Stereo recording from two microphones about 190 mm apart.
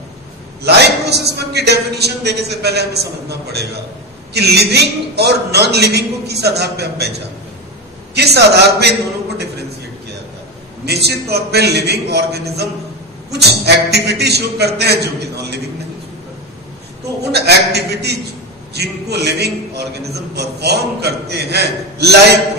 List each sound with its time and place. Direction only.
0.6 s a man's voice: 60° right (ahead or behind)
10.9 s a man's voice: 60° right (ahead or behind)
17.3 s a man's voice: 60° right (ahead or behind)